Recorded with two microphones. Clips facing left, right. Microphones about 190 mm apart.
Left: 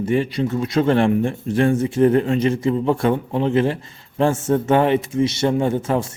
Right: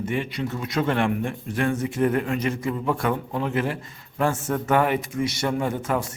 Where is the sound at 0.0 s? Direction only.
35° left (ahead or behind).